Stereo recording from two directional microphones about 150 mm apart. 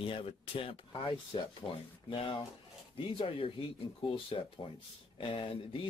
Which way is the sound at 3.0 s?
35° left (ahead or behind).